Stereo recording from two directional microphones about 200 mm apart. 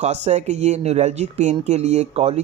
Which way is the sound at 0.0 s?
35° right (ahead or behind).